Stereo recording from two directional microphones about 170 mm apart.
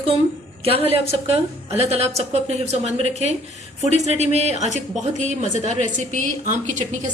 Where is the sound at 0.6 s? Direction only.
35° right (ahead or behind).